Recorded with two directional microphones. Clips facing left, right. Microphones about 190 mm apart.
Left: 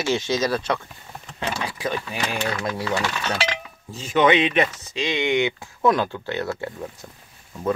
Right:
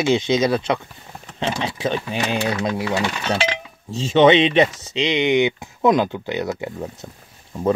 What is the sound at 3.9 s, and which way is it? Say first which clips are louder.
Speech: right 5 dB; 25° right (ahead or behind).